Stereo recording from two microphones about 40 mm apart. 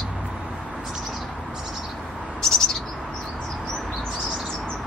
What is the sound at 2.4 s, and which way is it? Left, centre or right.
Bird, centre.